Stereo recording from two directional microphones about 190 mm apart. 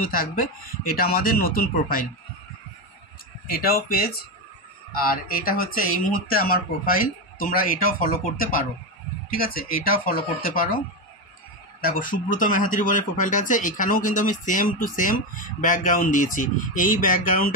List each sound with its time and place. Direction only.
0.1 s speech: 50° left (ahead or behind)
3.5 s speech: 50° left (ahead or behind)
11.8 s speech: 50° left (ahead or behind)